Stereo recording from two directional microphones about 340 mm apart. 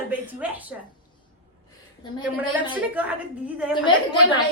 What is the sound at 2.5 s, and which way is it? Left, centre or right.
Speech, centre.